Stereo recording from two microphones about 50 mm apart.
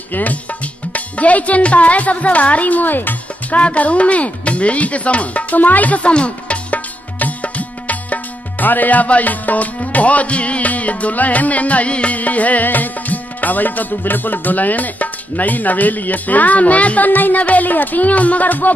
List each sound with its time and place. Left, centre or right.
0.1 s speech: left